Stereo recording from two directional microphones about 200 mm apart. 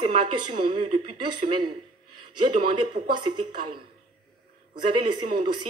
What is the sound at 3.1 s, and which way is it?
Speech, 25° right (ahead or behind).